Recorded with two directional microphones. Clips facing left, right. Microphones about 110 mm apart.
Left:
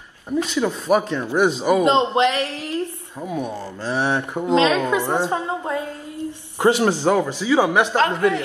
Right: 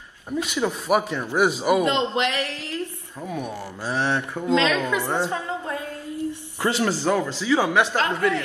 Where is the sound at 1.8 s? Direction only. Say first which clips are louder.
Left 6 dB; 20° left (ahead or behind).